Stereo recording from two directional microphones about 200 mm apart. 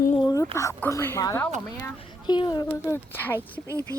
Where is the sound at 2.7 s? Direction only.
10° left (ahead or behind).